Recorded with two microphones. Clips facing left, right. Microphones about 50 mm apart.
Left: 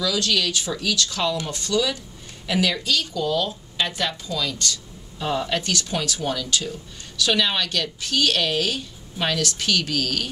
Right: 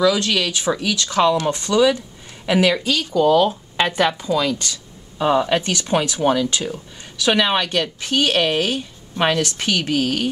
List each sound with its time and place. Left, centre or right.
0.0 s a woman's voice: right